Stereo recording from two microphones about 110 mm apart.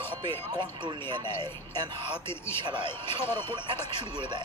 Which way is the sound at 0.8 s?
45° right (ahead or behind).